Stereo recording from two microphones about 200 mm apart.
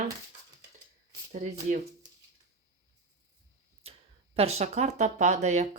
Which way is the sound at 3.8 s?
30° right (ahead or behind).